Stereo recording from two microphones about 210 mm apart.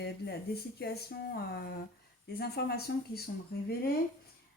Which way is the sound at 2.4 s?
50° left (ahead or behind).